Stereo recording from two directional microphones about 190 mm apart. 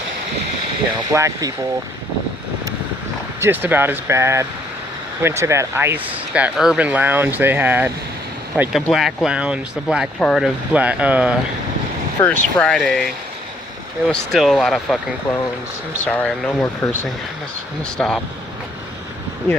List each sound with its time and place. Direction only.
1.1 s speech: 15° right (ahead or behind)
3.4 s speech: 10° right (ahead or behind)
12.2 s speech: 15° left (ahead or behind)
12.5 s speech: 5° left (ahead or behind)
14.1 s speech: centre (ahead or behind)
16.0 s speech: 5° left (ahead or behind)
17.9 s speech: 5° left (ahead or behind)